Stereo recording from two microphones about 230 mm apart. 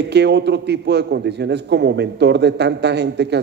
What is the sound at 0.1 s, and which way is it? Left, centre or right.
A man's voice, right.